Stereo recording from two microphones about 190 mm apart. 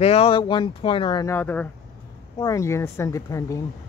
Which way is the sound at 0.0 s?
30° left (ahead or behind).